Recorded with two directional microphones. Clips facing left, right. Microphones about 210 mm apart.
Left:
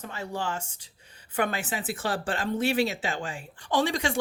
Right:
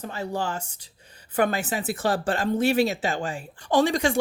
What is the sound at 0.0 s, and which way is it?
Speech, 35° right (ahead or behind).